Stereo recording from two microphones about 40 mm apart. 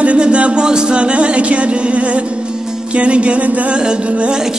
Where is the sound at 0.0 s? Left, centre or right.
Right.